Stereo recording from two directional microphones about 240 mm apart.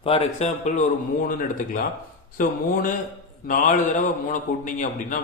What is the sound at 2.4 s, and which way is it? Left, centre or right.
A man's voice, left.